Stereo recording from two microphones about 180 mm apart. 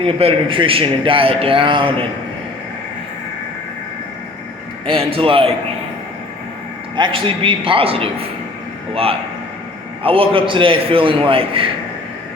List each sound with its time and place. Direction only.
0.0 s a man's voice: 30° right (ahead or behind)
4.9 s a man's voice: 30° right (ahead or behind)
6.9 s a man's voice: 25° right (ahead or behind)
10.0 s a man's voice: 30° right (ahead or behind)